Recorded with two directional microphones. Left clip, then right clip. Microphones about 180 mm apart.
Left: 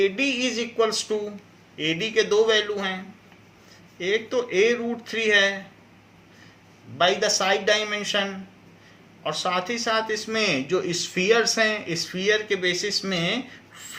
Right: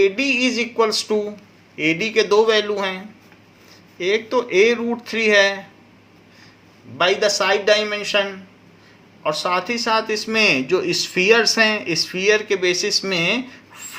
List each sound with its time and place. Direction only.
0.0 s music: 45° right (ahead or behind)
1.8 s speech: 45° right (ahead or behind)
3.9 s speech: 50° right (ahead or behind)
7.0 s speech: 40° right (ahead or behind)